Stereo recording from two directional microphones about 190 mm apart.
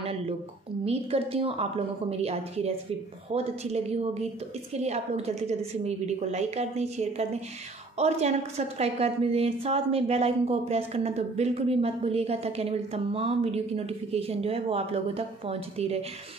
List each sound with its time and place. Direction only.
0.8 s a woman's voice: 30° right (ahead or behind)